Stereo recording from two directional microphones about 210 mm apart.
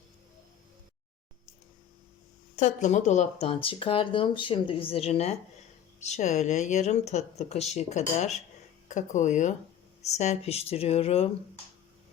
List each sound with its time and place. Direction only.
2.6 s speech: 35° left (ahead or behind)